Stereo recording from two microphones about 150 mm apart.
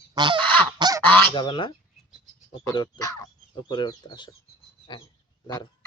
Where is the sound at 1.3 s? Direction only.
30° left (ahead or behind).